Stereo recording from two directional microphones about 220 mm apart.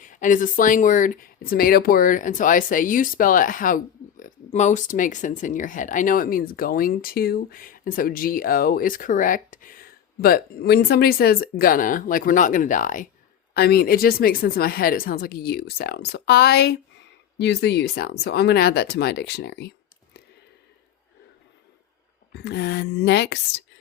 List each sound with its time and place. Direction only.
0.0 s speech: 35° left (ahead or behind)
22.3 s speech: 50° left (ahead or behind)